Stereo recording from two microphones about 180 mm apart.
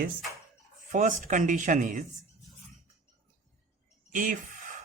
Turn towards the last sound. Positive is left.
turn(degrees=-45)  # may be behind; listen again after turning